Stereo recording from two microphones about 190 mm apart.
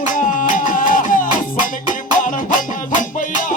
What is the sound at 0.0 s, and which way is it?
Music, 45° left (ahead or behind).